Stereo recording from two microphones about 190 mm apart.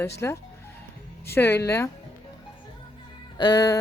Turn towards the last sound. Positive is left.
turn(degrees=20)  # may be behind; listen again after turning